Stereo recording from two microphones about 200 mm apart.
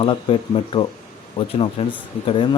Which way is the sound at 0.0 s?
25° left (ahead or behind).